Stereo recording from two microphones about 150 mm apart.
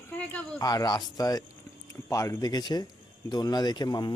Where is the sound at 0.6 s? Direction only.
25° left (ahead or behind).